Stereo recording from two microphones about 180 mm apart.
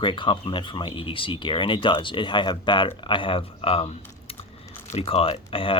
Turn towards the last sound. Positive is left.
turn(degrees=30)  # may be behind; listen again after turning